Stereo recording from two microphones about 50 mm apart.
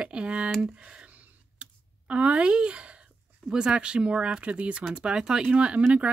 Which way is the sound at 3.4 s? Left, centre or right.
Centre.